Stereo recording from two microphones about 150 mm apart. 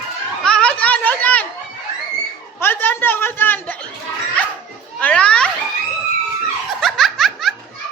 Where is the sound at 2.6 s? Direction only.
15° left (ahead or behind).